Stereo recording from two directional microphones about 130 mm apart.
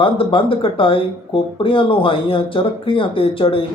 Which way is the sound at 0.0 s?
40° left (ahead or behind).